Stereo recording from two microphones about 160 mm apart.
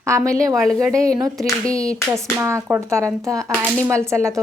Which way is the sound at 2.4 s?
15° right (ahead or behind).